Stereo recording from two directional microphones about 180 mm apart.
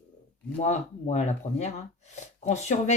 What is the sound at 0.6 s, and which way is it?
Speech, 40° left (ahead or behind).